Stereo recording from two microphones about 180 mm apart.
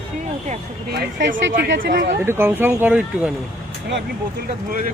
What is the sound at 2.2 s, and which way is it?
Speech, 15° right (ahead or behind).